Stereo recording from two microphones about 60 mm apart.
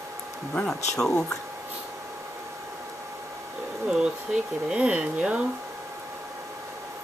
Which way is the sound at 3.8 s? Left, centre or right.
Centre.